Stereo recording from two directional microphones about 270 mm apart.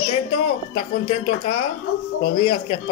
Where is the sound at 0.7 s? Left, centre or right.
Left.